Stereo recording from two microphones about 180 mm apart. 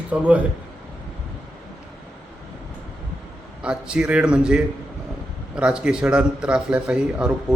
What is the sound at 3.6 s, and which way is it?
A man's voice, 5° right (ahead or behind).